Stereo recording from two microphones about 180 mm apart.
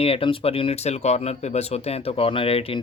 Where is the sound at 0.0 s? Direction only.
30° left (ahead or behind).